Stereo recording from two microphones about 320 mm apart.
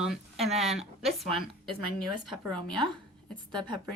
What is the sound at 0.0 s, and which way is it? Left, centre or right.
A woman's voice, centre.